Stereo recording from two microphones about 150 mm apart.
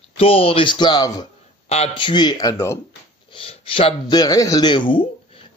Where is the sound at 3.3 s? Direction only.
35° left (ahead or behind).